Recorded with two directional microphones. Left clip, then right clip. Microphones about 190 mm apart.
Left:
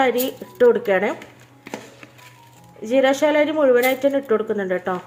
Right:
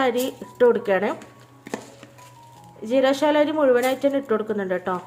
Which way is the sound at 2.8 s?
5° left (ahead or behind).